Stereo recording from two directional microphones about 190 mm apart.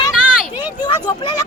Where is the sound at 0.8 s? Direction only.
25° left (ahead or behind).